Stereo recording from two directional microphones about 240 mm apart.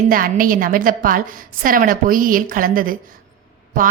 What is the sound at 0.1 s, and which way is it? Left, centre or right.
A woman's voice, right.